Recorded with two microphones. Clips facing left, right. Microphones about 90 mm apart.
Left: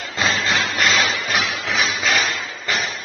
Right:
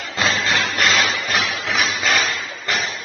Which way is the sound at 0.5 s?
Centre (ahead or behind).